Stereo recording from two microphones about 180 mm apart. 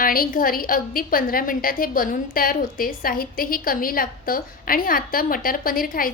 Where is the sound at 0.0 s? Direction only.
55° left (ahead or behind).